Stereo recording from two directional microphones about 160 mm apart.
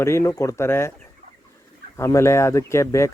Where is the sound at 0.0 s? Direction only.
15° left (ahead or behind).